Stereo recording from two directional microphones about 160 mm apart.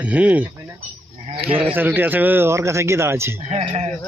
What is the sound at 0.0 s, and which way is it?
Speech, 10° right (ahead or behind).